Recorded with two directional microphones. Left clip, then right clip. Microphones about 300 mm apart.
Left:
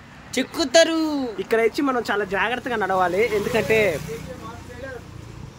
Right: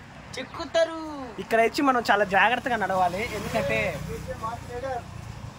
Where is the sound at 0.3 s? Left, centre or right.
Left.